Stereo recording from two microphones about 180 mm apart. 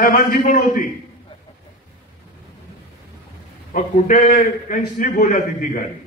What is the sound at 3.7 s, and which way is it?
A man's voice, 50° left (ahead or behind).